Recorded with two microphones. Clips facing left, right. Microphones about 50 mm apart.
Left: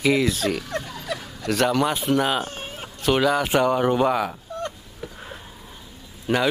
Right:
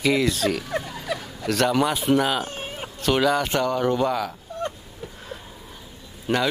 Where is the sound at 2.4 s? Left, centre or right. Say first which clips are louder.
Right 1 dB; centre.